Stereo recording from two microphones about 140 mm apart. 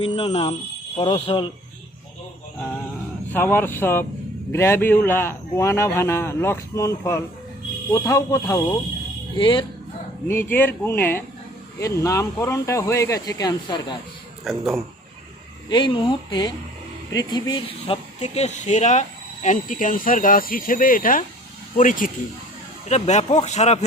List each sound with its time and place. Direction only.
0.0 s speech: 45° left (ahead or behind)
3.3 s a man's voice: 15° left (ahead or behind)
9.3 s speech: 35° left (ahead or behind)
10.2 s a man's voice: 15° left (ahead or behind); by 14.0 s 30° left (ahead or behind)
14.4 s speech: centre (ahead or behind)
15.7 s speech: 35° left (ahead or behind); by 22.1 s 70° left (ahead or behind)
22.9 s speech: 55° left (ahead or behind)